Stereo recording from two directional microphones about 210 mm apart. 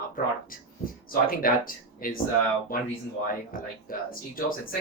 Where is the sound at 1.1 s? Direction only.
45° left (ahead or behind).